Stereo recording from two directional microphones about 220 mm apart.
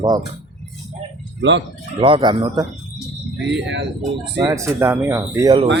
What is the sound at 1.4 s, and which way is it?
Speech, 55° right (ahead or behind).